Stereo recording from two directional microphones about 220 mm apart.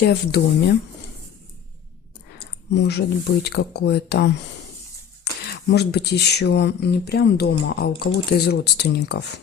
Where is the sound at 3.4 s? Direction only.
50° left (ahead or behind).